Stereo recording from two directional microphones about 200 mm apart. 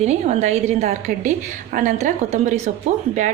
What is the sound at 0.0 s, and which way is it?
Speech, 35° right (ahead or behind).